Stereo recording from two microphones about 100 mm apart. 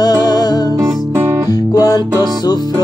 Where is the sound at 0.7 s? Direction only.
30° right (ahead or behind).